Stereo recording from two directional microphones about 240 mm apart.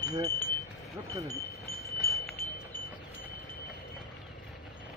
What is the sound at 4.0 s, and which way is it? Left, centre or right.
Vehicle, centre.